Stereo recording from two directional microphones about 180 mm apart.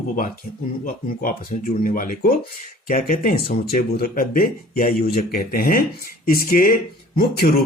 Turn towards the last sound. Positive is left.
turn(degrees=45)  # may be behind; listen again after turning